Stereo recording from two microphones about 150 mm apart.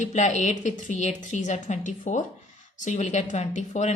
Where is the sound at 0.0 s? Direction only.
55° left (ahead or behind).